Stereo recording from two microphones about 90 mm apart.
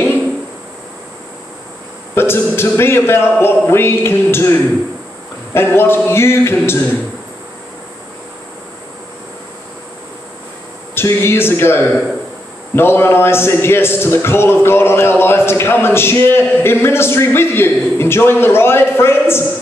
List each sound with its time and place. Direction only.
2.1 s a man's voice: 25° left (ahead or behind)
11.0 s a man's voice: 25° left (ahead or behind)